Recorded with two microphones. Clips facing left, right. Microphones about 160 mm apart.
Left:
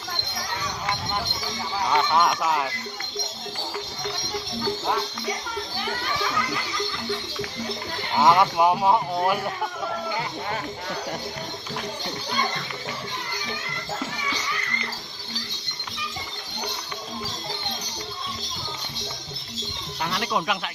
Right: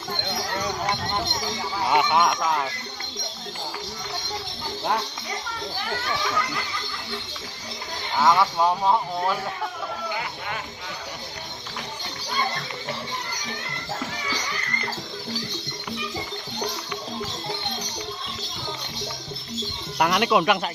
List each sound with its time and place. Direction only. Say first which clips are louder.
1.9 s speech: right 1 dB; 15° right (ahead or behind)
2.2 s music: even; centre (ahead or behind)
8.1 s speech: left 1 dB; 15° left (ahead or behind)
20.0 s speech: right 7 dB; 75° right (ahead or behind)